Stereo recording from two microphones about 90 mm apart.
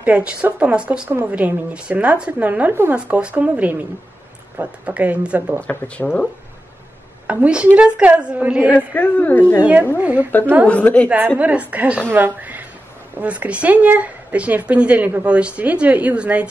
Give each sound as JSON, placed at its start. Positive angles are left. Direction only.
{"t": 0.0, "sound": "speech", "side_deg": -15}
{"t": 5.6, "sound": "speech", "side_deg": 15}
{"t": 7.2, "sound": "speech", "side_deg": -15}
{"t": 8.7, "sound": "speech", "side_deg": 15}
{"t": 9.9, "sound": "speech", "side_deg": -15}
{"t": 10.7, "sound": "speech", "side_deg": 15}
{"t": 11.1, "sound": "speech", "side_deg": -20}